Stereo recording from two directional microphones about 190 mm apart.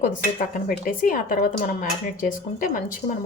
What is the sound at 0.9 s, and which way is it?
A woman's voice, 45° left (ahead or behind).